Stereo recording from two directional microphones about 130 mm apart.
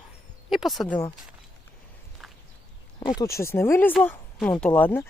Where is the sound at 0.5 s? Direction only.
Centre (ahead or behind).